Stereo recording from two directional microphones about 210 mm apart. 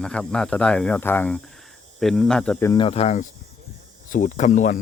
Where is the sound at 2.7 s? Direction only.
30° left (ahead or behind).